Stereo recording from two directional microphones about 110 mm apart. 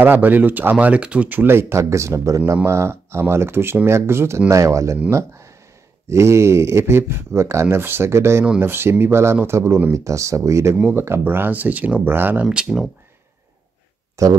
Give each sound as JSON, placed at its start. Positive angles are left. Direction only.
{"t": 0.0, "sound": "speech", "side_deg": -15}
{"t": 6.0, "sound": "speech", "side_deg": -25}
{"t": 12.4, "sound": "speech", "side_deg": -5}
{"t": 14.2, "sound": "speech", "side_deg": -30}